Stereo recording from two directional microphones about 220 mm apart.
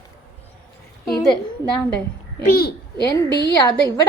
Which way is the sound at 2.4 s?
45° left (ahead or behind).